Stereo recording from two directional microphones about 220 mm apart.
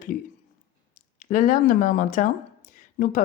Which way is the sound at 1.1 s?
35° left (ahead or behind).